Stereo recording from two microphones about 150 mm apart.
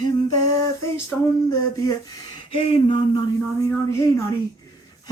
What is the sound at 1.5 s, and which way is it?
Speech, 25° left (ahead or behind).